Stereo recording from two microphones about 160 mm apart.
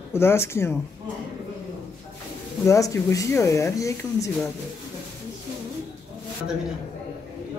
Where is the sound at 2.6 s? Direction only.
20° left (ahead or behind).